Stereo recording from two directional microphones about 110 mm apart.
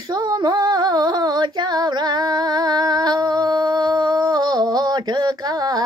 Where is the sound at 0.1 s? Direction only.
40° right (ahead or behind).